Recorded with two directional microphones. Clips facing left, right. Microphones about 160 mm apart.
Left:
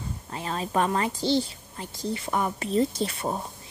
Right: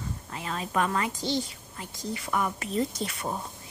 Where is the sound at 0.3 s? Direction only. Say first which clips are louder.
Left 4 dB; 30° left (ahead or behind).